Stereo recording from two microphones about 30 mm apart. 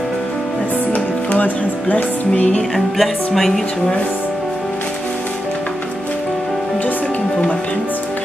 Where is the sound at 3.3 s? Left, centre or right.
Centre.